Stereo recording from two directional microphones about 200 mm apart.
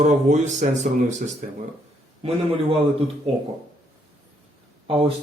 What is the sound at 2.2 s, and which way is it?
Speech, 25° right (ahead or behind).